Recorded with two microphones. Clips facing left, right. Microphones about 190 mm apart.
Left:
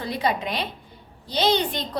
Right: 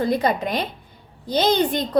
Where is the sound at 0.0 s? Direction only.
45° right (ahead or behind).